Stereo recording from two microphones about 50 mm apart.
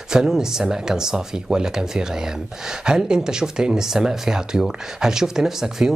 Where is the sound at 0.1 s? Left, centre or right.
Centre.